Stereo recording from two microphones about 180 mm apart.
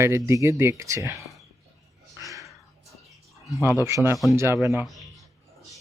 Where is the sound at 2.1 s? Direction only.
20° right (ahead or behind).